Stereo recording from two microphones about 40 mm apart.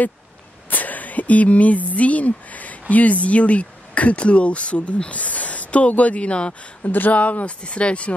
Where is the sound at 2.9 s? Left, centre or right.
Left.